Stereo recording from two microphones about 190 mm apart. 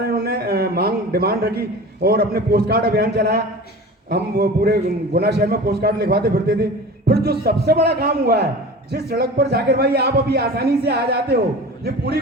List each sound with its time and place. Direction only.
0.0 s a man's voice: 55° right (ahead or behind)